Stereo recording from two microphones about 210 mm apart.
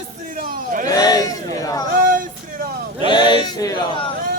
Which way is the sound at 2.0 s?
40° right (ahead or behind).